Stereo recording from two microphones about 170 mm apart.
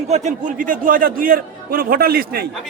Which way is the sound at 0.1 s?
45° right (ahead or behind).